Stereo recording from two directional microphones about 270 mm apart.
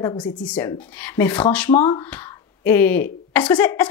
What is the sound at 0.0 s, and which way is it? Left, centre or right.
Speech, centre.